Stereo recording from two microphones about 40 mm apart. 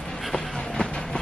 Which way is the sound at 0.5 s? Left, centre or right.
Centre.